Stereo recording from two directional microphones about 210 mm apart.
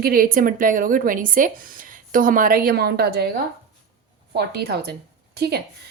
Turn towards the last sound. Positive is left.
turn(degrees=-50)  # may be behind; listen again after turning